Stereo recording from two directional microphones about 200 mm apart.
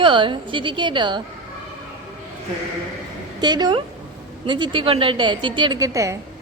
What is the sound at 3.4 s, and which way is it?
A woman's voice, 20° right (ahead or behind).